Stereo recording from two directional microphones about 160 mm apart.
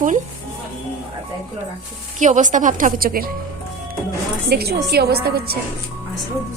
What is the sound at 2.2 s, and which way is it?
A woman's voice, 50° right (ahead or behind).